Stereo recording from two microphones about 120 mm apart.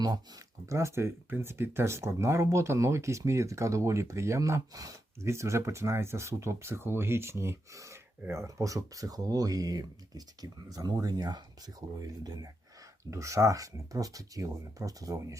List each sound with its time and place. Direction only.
0.0 s speech: 30° right (ahead or behind)